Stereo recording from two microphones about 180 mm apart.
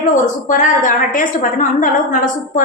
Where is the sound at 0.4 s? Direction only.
45° left (ahead or behind).